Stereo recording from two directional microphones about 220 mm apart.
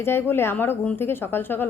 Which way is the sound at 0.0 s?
10° left (ahead or behind).